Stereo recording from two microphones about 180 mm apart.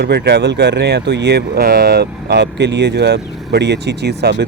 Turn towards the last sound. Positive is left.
turn(degrees=-65)  # may be behind; listen again after turning